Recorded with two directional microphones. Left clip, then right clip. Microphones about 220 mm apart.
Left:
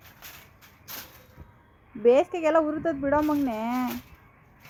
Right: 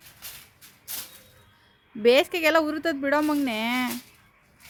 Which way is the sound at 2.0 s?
60° right (ahead or behind).